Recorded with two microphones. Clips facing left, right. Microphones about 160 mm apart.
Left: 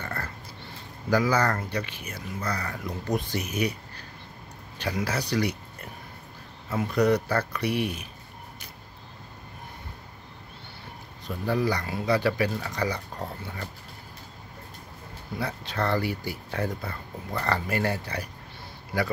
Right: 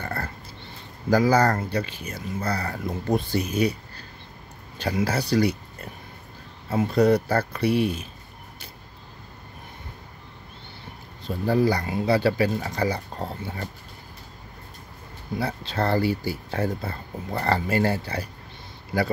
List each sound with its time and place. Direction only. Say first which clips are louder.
0.0 s a sound: right 4 dB; 30° right (ahead or behind)
1.1 s speech: right 4 dB; 35° right (ahead or behind)
4.7 s speech: right 4 dB; 30° right (ahead or behind)
6.7 s speech: right 4 dB; 30° right (ahead or behind)
11.2 s speech: right 5 dB; 30° right (ahead or behind)
15.3 s speech: right 4 dB; 30° right (ahead or behind)